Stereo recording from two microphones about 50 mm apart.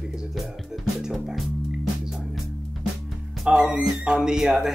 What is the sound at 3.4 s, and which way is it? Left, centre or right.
Speech, centre.